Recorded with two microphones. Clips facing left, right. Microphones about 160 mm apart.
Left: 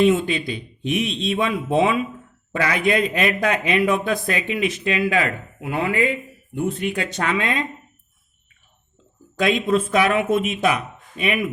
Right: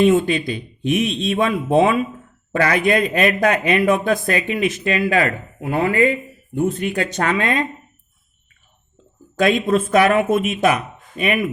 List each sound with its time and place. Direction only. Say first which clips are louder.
0.0 s speech: right 3 dB; 50° right (ahead or behind)
9.3 s speech: right 3 dB; 50° right (ahead or behind)